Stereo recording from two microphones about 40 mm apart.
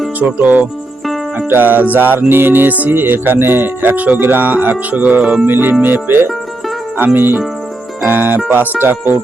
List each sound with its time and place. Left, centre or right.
0.2 s speech: right
1.5 s music: right
4.0 s speech: right
5.5 s music: right
6.9 s speech: right
8.8 s music: right